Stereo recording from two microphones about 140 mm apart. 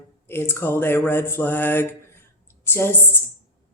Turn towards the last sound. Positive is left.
turn(degrees=15)  # may be behind; listen again after turning